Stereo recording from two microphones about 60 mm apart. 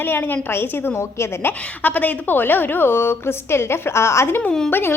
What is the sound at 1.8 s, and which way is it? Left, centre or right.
A woman's voice, left.